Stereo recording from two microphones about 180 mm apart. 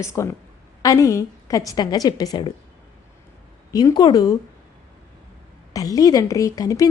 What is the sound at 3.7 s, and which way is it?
Speech, 20° left (ahead or behind).